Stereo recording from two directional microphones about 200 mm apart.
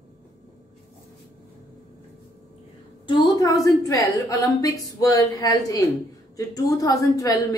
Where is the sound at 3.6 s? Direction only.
15° left (ahead or behind).